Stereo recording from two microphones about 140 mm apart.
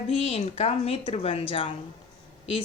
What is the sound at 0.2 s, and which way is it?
A woman's voice, 45° left (ahead or behind).